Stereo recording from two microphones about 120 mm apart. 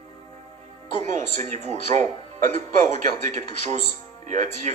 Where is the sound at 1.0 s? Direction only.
90° right.